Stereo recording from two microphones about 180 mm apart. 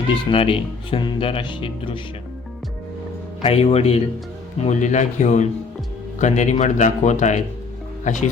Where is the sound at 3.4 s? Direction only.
35° left (ahead or behind).